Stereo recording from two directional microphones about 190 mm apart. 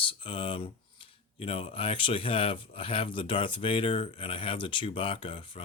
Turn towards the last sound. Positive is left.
turn(degrees=30)  # may be behind; listen again after turning